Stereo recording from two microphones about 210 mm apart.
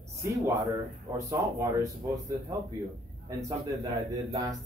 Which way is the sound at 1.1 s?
15° right (ahead or behind).